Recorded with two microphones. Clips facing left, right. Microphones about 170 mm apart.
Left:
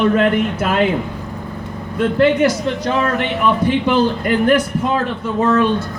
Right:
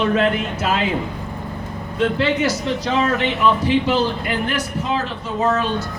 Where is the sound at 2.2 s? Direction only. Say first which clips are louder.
Left 6 dB; 50° left (ahead or behind).